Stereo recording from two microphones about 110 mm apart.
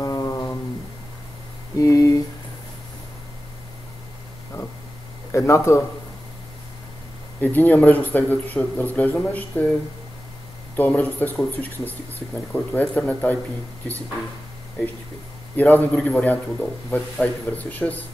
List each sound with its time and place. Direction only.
0.0 s a sound: 35° left (ahead or behind)
1.8 s a sound: 30° left (ahead or behind)
5.3 s speech: 25° left (ahead or behind)
7.3 s speech: 15° left (ahead or behind)
10.8 s speech: 15° left (ahead or behind)
15.5 s speech: 15° left (ahead or behind)